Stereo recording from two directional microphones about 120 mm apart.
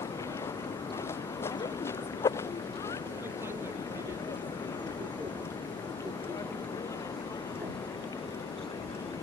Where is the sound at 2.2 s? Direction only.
20° left (ahead or behind).